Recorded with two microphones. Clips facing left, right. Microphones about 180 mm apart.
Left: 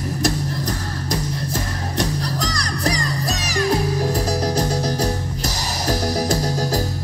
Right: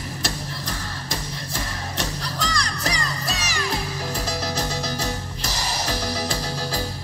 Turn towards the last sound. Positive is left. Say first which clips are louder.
# left 7 dB
turn(degrees=40)  # may be behind; listen again after turning